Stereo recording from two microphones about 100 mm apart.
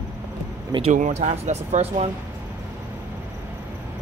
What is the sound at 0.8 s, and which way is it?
Speech, 90° right.